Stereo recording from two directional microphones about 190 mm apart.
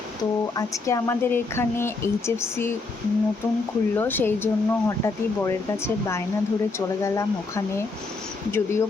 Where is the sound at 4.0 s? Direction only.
10° left (ahead or behind).